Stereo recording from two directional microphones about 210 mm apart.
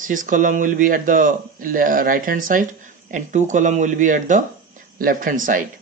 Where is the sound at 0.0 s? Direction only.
40° right (ahead or behind).